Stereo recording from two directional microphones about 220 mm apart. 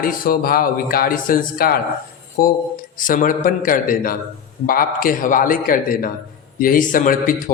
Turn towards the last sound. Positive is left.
turn(degrees=40)  # may be behind; listen again after turning